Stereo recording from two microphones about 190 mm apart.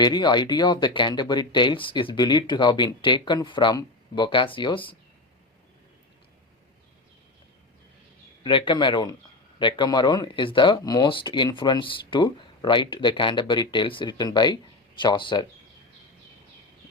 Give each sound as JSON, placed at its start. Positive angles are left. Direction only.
{"t": 0.0, "sound": "speech", "side_deg": 20}
{"t": 8.4, "sound": "speech", "side_deg": 25}